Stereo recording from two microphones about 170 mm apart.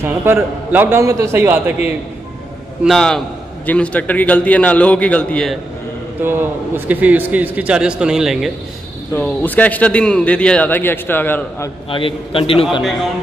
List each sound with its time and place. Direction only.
0.0 s a man's voice: 15° right (ahead or behind)
2.8 s a man's voice: centre (ahead or behind)
6.2 s a man's voice: 10° right (ahead or behind)
9.1 s a man's voice: 10° left (ahead or behind)
11.9 s a man's voice: 30° left (ahead or behind)